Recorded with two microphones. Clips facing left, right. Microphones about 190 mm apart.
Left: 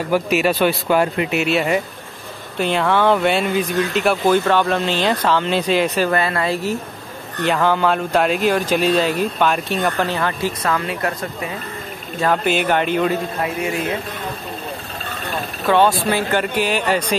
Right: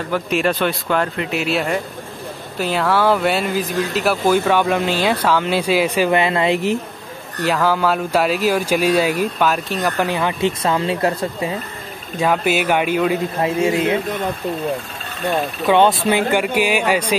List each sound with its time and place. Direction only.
0.1 s speech: 5° left (ahead or behind); by 6.8 s 20° right (ahead or behind)
7.4 s speech: 5° right (ahead or behind)
9.9 s speech: 15° right (ahead or behind)
12.2 s speech: 10° right (ahead or behind)
13.4 s speech: 25° right (ahead or behind)
15.6 s speech: 20° right (ahead or behind)